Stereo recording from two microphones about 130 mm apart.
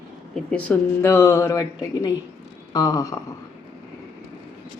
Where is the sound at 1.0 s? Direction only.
20° left (ahead or behind).